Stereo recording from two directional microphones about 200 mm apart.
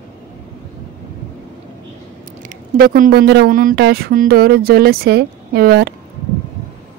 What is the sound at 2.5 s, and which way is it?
Speech, 45° right (ahead or behind).